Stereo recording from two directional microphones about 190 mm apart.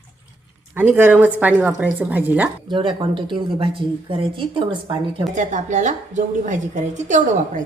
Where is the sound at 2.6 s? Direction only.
25° right (ahead or behind).